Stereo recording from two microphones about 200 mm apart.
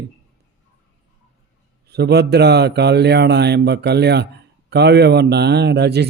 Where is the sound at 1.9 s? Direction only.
55° right (ahead or behind).